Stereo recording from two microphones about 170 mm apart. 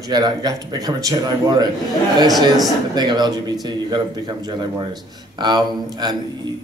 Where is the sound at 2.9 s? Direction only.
25° right (ahead or behind).